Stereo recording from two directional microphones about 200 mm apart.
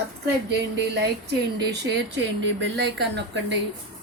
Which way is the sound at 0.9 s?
55° right (ahead or behind).